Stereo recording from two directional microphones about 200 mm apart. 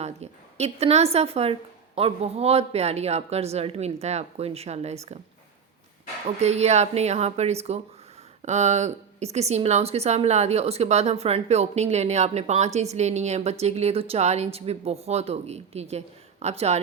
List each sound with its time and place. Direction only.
0.0 s a woman's voice: 35° right (ahead or behind)
6.2 s a woman's voice: 35° right (ahead or behind)